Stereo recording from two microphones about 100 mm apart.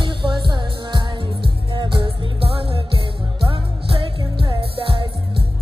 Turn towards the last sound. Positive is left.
turn(degrees=-60)  # may be behind; listen again after turning